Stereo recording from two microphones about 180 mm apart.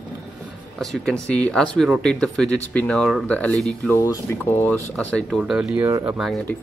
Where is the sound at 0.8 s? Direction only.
5° left (ahead or behind).